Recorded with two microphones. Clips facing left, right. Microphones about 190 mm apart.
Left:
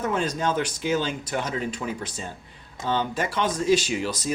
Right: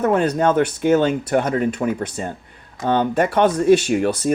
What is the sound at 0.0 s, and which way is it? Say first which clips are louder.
Speech: right 8 dB; 60° right (ahead or behind).